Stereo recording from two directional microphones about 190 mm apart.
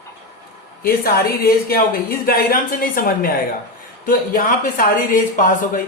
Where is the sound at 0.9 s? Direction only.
50° left (ahead or behind).